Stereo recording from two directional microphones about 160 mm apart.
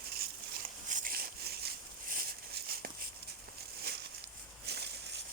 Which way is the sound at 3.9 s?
90° right.